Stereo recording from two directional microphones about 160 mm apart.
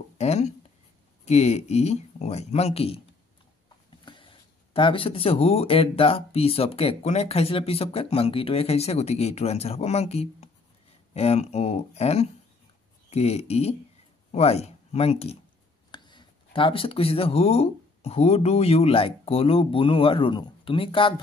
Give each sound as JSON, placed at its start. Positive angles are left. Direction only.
{"t": 0.2, "sound": "speech", "side_deg": 45}
{"t": 4.0, "sound": "speech", "side_deg": 30}
{"t": 15.9, "sound": "speech", "side_deg": 30}